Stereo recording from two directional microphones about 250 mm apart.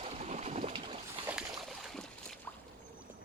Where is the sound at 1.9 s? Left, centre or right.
Centre.